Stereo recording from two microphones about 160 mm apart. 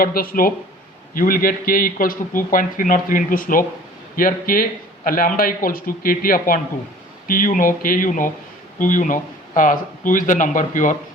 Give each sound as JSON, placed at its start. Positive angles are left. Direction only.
{"t": 0.0, "sound": "a man's voice", "side_deg": 65}